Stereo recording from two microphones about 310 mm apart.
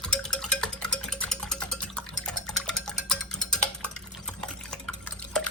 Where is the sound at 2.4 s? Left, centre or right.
Centre.